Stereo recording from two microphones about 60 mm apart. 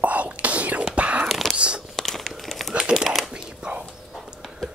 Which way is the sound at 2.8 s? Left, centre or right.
Centre.